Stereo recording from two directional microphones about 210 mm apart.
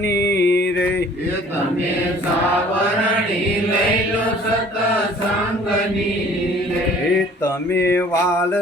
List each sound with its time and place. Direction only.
0.1 s music: 15° left (ahead or behind)
0.3 s music: 55° left (ahead or behind)
7.9 s mantra: 10° left (ahead or behind)